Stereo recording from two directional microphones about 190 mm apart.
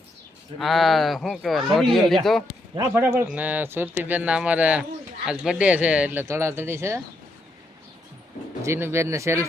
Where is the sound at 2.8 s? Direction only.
15° right (ahead or behind).